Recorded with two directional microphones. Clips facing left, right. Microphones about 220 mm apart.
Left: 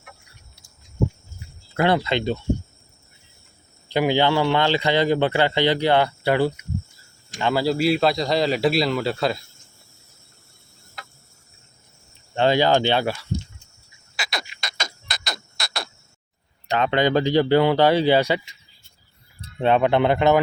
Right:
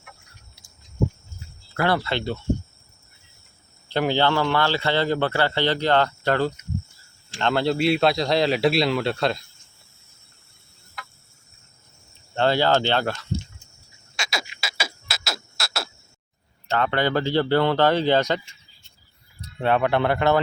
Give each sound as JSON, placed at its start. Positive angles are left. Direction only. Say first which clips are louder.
{"t": 1.7, "sound": "a man's voice", "louder": "left 3 dB", "side_deg": 20}
{"t": 3.8, "sound": "a man's voice", "louder": "left 2 dB", "side_deg": 15}
{"t": 12.3, "sound": "a man's voice", "louder": "left 2 dB", "side_deg": 15}
{"t": 14.2, "sound": "a sound", "louder": "even", "side_deg": 0}
{"t": 16.6, "sound": "a man's voice", "louder": "left 3 dB", "side_deg": 15}
{"t": 19.6, "sound": "a man's voice", "louder": "left 3 dB", "side_deg": 20}